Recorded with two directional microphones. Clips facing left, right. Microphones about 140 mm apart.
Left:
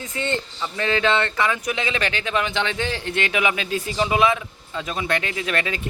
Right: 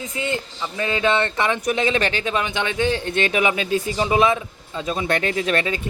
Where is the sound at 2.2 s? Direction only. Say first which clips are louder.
Even; 25° right (ahead or behind).